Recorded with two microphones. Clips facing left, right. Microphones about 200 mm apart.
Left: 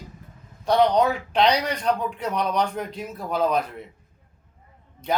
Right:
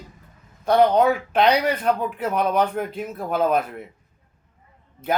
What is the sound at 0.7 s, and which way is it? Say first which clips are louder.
A man's voice: right 2 dB; 5° right (ahead or behind).